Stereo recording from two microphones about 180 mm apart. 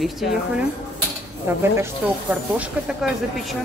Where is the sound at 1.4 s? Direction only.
10° right (ahead or behind).